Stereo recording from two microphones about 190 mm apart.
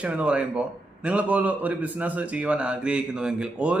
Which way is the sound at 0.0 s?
5° right (ahead or behind).